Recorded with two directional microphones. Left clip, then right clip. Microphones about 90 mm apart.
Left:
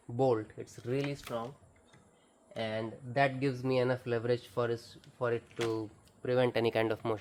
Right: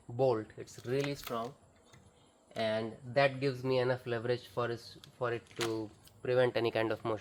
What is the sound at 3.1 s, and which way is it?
Speech, 65° left (ahead or behind).